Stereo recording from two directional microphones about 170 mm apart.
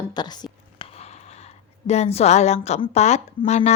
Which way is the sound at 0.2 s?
25° left (ahead or behind).